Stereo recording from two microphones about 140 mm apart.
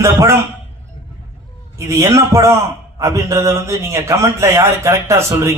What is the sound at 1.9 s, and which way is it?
A man's voice, 20° right (ahead or behind).